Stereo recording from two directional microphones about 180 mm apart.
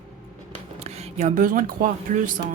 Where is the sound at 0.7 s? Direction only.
35° right (ahead or behind).